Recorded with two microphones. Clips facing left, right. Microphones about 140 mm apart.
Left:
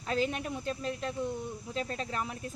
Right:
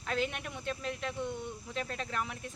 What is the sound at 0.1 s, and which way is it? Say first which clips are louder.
Speech: left 3 dB; 35° left (ahead or behind).